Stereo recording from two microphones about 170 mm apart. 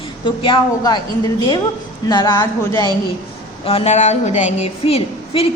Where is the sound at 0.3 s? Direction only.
30° left (ahead or behind).